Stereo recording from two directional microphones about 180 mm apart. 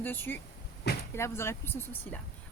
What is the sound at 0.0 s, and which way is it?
Speech, 10° left (ahead or behind).